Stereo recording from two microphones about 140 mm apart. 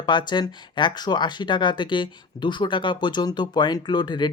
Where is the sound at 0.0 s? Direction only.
35° left (ahead or behind).